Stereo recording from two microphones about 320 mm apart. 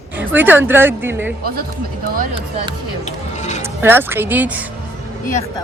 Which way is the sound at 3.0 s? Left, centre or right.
Left.